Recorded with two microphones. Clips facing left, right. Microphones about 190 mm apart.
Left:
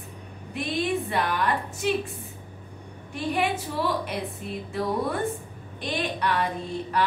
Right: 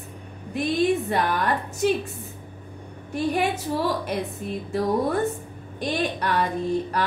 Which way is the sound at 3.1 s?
40° right (ahead or behind).